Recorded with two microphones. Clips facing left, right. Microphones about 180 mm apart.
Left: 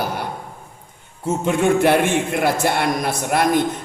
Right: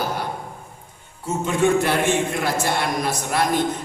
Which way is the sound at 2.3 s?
55° left (ahead or behind).